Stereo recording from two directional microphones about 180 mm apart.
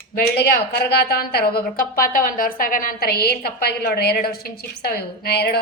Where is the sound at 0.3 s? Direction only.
60° left (ahead or behind).